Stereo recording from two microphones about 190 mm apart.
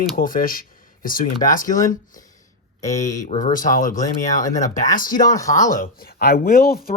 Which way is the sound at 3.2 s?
40° left (ahead or behind).